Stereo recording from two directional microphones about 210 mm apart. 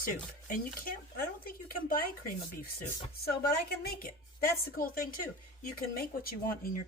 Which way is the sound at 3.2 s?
45° left (ahead or behind).